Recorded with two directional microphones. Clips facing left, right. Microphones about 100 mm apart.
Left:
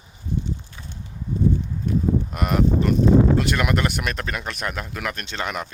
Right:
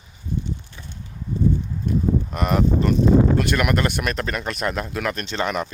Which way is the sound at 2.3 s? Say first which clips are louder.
Right 2 dB; 5° left (ahead or behind).